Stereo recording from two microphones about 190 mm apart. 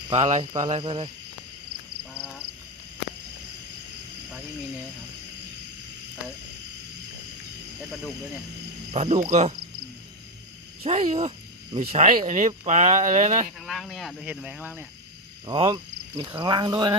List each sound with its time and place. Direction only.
0.1 s speech: 35° right (ahead or behind)
8.9 s speech: 35° right (ahead or behind)
10.8 s speech: 30° right (ahead or behind)
13.6 s speech: centre (ahead or behind)
15.4 s speech: 25° right (ahead or behind)